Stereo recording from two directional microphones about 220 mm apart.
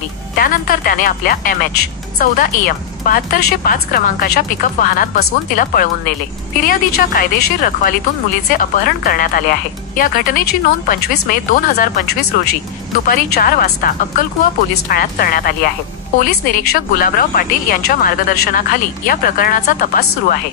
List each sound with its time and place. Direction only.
0.4 s a woman's voice: 40° left (ahead or behind)